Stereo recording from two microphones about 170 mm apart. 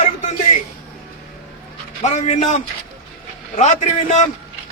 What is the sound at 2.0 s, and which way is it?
A man's voice, 45° left (ahead or behind).